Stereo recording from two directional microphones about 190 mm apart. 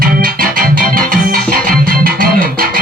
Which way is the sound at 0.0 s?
50° right (ahead or behind).